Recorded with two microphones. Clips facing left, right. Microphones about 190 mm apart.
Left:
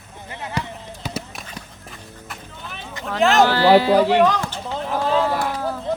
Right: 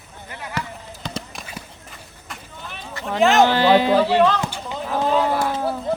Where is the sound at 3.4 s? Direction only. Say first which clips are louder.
Left 1 dB; 20° right (ahead or behind).